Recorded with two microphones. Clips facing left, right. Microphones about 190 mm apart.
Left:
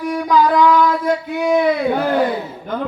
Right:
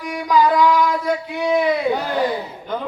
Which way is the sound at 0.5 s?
5° right (ahead or behind).